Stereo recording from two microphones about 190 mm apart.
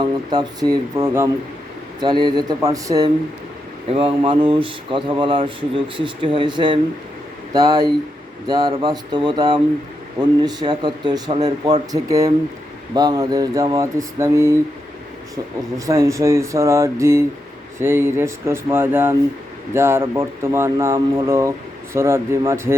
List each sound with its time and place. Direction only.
0.0 s speech: 20° right (ahead or behind)
3.8 s speech: 30° right (ahead or behind); by 14.6 s 15° right (ahead or behind)
15.9 s speech: 15° right (ahead or behind)